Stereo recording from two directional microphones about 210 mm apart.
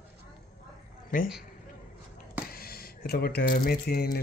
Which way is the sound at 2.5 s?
45° left (ahead or behind).